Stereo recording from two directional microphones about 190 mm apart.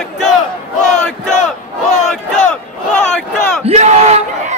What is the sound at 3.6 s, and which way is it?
Battle cry, 35° right (ahead or behind).